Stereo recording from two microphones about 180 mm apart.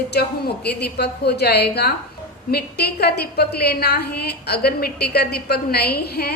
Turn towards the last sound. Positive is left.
turn(degrees=60)  # may be behind; listen again after turning